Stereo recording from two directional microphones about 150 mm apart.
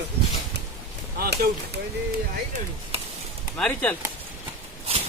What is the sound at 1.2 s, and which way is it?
Speech, 90° right.